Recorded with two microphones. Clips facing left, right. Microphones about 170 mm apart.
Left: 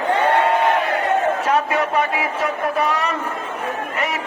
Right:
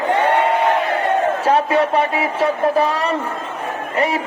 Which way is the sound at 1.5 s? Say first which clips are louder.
Right 4 dB; 30° right (ahead or behind).